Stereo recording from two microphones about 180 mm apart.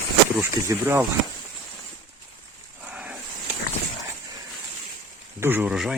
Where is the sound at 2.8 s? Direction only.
5° right (ahead or behind).